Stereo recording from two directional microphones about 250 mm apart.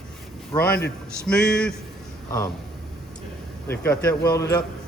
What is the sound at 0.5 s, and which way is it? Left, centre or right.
Speech, centre.